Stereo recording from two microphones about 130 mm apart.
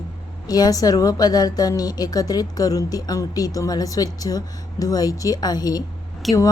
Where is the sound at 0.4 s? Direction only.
30° left (ahead or behind).